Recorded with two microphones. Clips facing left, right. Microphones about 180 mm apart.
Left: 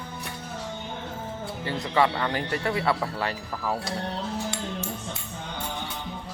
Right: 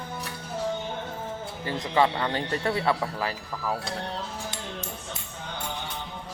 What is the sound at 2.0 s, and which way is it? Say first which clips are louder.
Speech: even; 20° right (ahead or behind).